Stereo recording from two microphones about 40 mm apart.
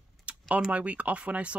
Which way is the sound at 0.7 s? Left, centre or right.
Right.